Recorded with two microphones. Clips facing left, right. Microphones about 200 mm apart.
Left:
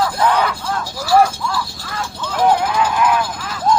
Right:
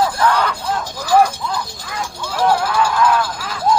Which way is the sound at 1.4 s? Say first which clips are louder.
Left 1 dB; 20° right (ahead or behind).